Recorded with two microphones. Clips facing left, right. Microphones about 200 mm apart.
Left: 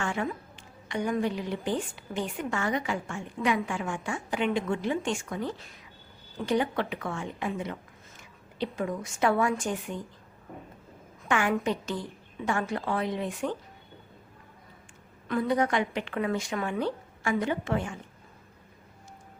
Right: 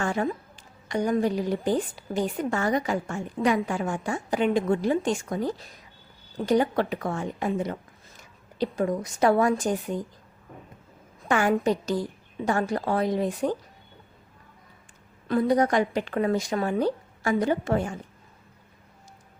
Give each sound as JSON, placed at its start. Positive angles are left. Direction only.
{"t": 0.0, "sound": "a woman's voice", "side_deg": -40}
{"t": 11.2, "sound": "a woman's voice", "side_deg": -40}
{"t": 15.3, "sound": "a woman's voice", "side_deg": -35}